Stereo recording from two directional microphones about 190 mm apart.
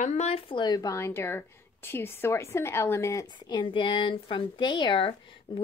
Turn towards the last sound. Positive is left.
turn(degrees=25)  # may be behind; listen again after turning